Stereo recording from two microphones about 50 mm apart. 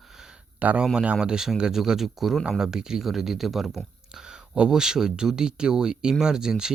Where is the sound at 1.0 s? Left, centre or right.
Centre.